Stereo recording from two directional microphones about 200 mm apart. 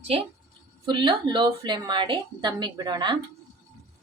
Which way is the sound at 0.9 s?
25° right (ahead or behind).